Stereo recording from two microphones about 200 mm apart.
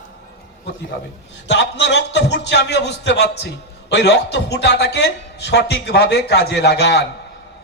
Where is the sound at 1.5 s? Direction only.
60° left (ahead or behind).